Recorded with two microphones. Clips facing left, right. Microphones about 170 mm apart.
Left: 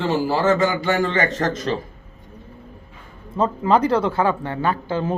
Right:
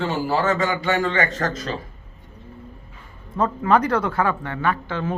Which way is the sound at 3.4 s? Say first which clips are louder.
Left 1 dB; 25° left (ahead or behind).